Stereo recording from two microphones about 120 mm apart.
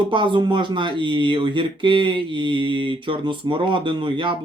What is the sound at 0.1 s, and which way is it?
Speech, 40° right (ahead or behind).